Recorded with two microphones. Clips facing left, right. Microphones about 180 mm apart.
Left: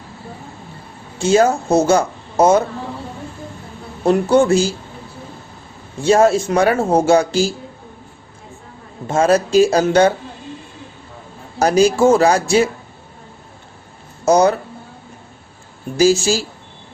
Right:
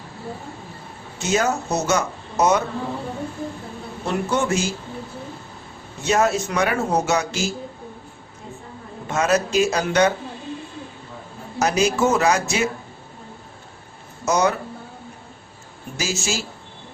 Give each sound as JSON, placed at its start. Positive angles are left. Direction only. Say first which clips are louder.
{"t": 1.2, "sound": "speech", "louder": "left 8 dB", "side_deg": 30}
{"t": 4.0, "sound": "speech", "louder": "left 10 dB", "side_deg": 35}
{"t": 6.0, "sound": "speech", "louder": "left 7 dB", "side_deg": 30}
{"t": 9.0, "sound": "speech", "louder": "left 6 dB", "side_deg": 30}
{"t": 11.6, "sound": "speech", "louder": "left 7 dB", "side_deg": 35}
{"t": 14.3, "sound": "speech", "louder": "left 7 dB", "side_deg": 35}
{"t": 16.0, "sound": "speech", "louder": "left 12 dB", "side_deg": 35}